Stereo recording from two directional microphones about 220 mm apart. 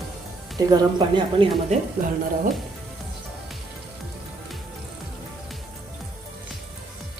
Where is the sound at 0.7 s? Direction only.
20° right (ahead or behind).